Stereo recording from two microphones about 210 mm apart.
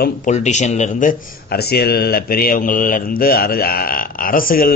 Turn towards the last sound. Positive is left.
turn(degrees=45)  # may be behind; listen again after turning